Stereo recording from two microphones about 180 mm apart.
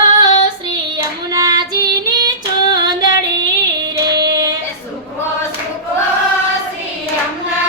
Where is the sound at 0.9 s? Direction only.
20° right (ahead or behind).